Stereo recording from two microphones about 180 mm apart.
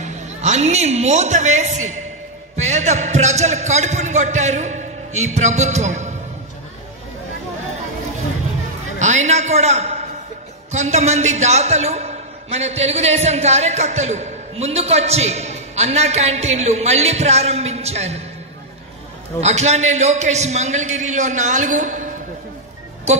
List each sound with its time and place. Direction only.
0.0 s a woman's voice: 40° right (ahead or behind)
9.0 s a man's voice: 40° right (ahead or behind)
19.4 s a man's voice: 40° right (ahead or behind)